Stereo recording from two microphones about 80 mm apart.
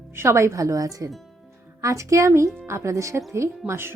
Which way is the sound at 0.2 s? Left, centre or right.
Right.